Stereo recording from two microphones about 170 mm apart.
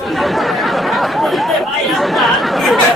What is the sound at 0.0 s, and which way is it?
Chatter, centre (ahead or behind).